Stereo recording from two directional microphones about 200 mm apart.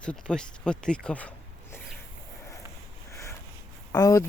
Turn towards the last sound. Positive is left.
turn(degrees=20)  # may be behind; listen again after turning